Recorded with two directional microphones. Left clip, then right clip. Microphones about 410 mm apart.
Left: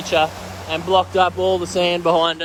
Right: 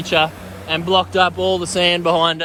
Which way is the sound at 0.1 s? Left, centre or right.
Centre.